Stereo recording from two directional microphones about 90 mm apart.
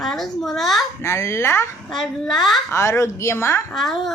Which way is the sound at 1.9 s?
5° left (ahead or behind).